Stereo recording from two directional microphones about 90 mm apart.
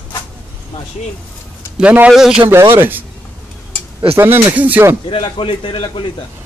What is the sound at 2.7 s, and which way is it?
Speech, 20° right (ahead or behind).